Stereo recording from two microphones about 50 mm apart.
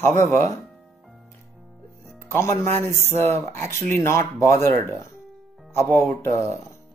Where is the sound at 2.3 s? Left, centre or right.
Left.